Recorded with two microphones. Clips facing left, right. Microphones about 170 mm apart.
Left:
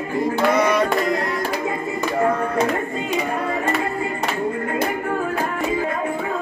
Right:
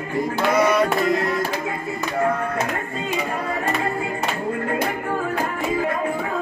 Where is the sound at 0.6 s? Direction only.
Centre (ahead or behind).